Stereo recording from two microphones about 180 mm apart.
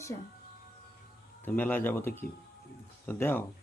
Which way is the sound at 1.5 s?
10° left (ahead or behind).